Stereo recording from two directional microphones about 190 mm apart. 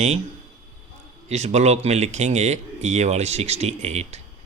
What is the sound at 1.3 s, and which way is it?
Speech, 35° right (ahead or behind).